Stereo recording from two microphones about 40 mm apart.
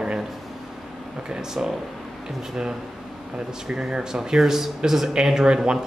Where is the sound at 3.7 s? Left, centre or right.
Right.